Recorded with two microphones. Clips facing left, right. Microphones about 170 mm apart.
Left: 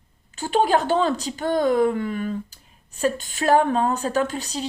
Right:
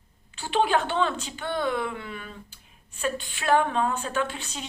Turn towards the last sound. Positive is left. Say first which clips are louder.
# left 6 dB
turn(degrees=35)  # may be behind; listen again after turning